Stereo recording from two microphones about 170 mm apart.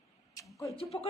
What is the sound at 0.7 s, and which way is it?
Speech, 35° left (ahead or behind).